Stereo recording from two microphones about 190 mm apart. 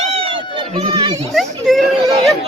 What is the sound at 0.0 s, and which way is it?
Run, 30° right (ahead or behind).